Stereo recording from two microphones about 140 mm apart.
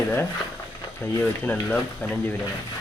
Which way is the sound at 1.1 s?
10° left (ahead or behind).